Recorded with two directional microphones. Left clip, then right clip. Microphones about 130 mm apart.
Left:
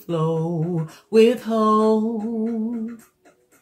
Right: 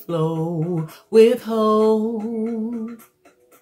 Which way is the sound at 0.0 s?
5° right (ahead or behind).